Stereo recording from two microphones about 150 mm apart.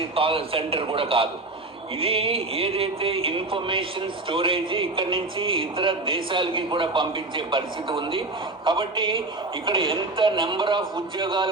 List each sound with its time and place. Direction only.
0.2 s speech: 40° right (ahead or behind)